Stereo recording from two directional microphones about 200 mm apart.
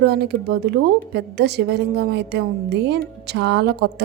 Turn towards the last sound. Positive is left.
turn(degrees=-55)  # may be behind; listen again after turning